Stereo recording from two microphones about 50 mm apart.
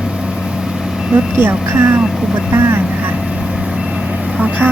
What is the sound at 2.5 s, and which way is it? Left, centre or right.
Speech, right.